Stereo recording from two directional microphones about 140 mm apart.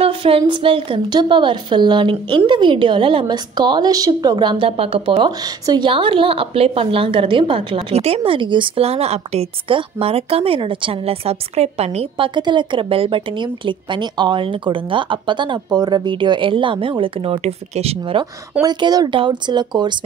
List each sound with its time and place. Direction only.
0.0 s a woman's voice: 40° right (ahead or behind)
5.4 s a woman's voice: 30° right (ahead or behind); by 12.3 s 45° right (ahead or behind)
12.4 s a woman's voice: 35° right (ahead or behind)
18.6 s a woman's voice: 30° right (ahead or behind)